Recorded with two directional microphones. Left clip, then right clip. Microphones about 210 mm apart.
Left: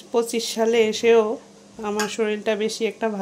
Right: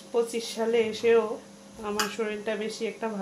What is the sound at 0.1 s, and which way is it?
Speech, 50° left (ahead or behind).